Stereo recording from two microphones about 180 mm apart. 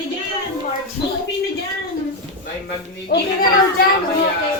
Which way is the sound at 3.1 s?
65° left (ahead or behind).